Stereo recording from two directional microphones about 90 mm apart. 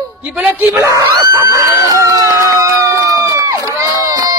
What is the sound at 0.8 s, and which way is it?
Screaming, 35° right (ahead or behind).